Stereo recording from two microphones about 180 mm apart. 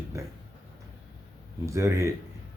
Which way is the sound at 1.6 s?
15° right (ahead or behind).